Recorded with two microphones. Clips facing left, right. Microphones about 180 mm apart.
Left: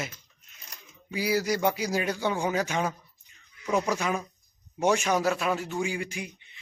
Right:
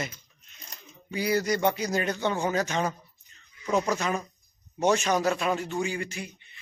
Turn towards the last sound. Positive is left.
turn(degrees=10)  # may be behind; listen again after turning